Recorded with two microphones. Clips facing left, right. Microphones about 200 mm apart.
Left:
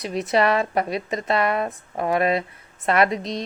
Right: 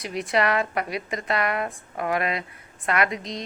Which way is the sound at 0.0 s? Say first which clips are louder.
Left 3 dB; 25° left (ahead or behind).